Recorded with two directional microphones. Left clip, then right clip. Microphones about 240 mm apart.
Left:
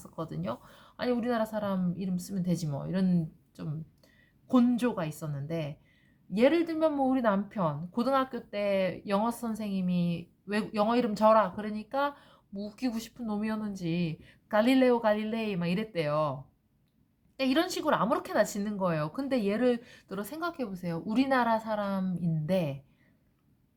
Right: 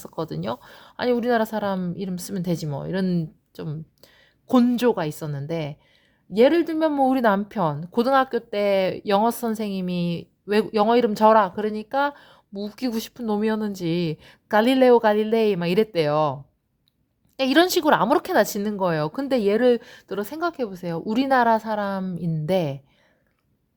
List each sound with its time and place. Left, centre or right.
0.0 s a woman's voice: right
17.3 s a woman's voice: right